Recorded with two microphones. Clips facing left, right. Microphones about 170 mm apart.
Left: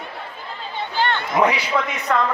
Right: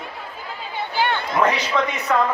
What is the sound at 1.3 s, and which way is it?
Speech, 10° left (ahead or behind).